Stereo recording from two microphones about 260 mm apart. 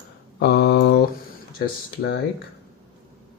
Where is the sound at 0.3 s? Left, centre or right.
Left.